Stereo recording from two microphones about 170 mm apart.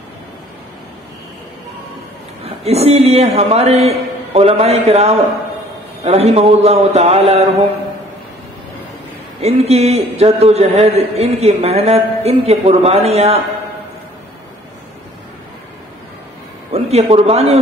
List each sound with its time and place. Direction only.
2.4 s a man's voice: 40° right (ahead or behind)
9.4 s a man's voice: 40° right (ahead or behind)
16.7 s a man's voice: 35° right (ahead or behind)